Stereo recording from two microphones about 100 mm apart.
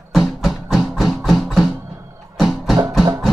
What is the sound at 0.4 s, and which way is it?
Music, centre (ahead or behind).